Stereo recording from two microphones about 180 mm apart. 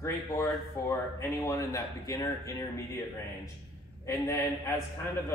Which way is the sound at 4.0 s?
15° left (ahead or behind).